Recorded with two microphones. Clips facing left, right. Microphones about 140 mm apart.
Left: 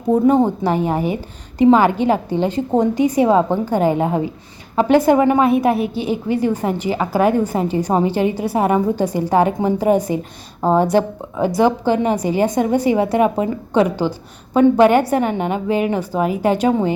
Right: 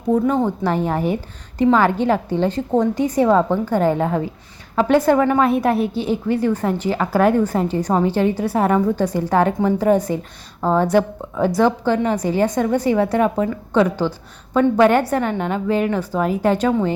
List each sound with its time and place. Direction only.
0.1 s a woman's voice: 20° left (ahead or behind)
0.6 s a woman's voice: 5° left (ahead or behind)